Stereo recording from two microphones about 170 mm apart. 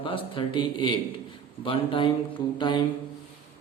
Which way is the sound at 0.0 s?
30° left (ahead or behind).